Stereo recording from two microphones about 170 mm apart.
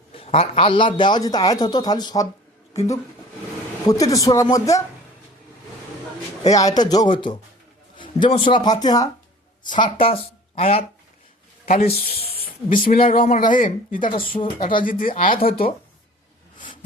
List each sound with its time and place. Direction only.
0.1 s a man's voice: 35° left (ahead or behind)
4.1 s a man's voice: 20° left (ahead or behind)
6.5 s a man's voice: 20° left (ahead or behind)
11.6 s speech: 55° left (ahead or behind)
14.1 s speech: 30° left (ahead or behind)
14.6 s speech: 55° left (ahead or behind)